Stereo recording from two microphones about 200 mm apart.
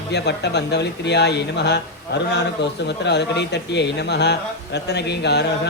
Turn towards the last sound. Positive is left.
turn(degrees=60)  # may be behind; listen again after turning